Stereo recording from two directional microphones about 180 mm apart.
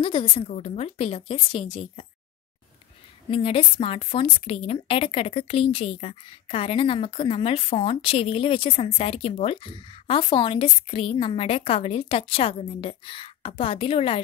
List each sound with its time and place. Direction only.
0.0 s a woman's voice: 30° left (ahead or behind)
3.3 s a woman's voice: 30° left (ahead or behind)